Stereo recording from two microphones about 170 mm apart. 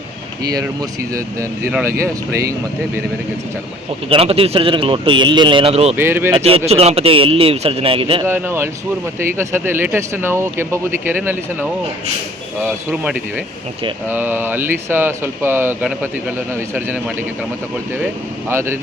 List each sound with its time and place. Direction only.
0.4 s speech: 20° right (ahead or behind)
4.1 s speech: 35° right (ahead or behind)
6.0 s speech: 15° right (ahead or behind)
6.3 s speech: 35° right (ahead or behind)
8.2 s speech: 15° right (ahead or behind)
12.6 s speech: 5° right (ahead or behind)
18.0 s speech: 15° right (ahead or behind)